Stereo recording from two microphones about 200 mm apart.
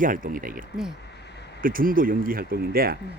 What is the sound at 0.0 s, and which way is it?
Speech, 45° right (ahead or behind).